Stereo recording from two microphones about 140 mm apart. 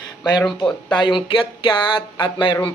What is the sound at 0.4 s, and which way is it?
Speech, 5° left (ahead or behind).